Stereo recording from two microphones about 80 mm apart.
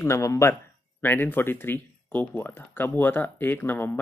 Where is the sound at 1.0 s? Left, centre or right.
Left.